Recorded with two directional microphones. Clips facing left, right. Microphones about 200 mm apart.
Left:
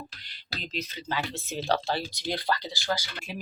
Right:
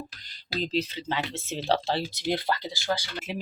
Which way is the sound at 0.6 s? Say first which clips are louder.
Right 8 dB; 30° right (ahead or behind).